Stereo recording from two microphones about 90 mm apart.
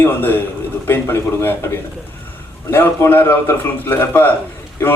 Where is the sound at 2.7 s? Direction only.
25° left (ahead or behind).